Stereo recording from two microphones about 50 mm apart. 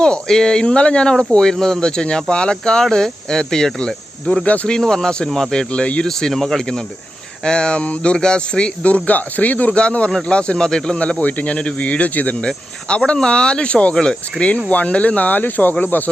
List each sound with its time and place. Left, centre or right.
0.0 s speech: centre
3.8 s cricket: centre
4.4 s speech: left
4.7 s speech: centre
6.1 s speech: centre
11.2 s speech: left
12.4 s speech: centre; by 16.0 s left